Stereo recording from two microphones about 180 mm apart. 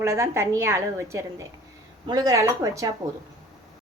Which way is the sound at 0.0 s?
15° right (ahead or behind).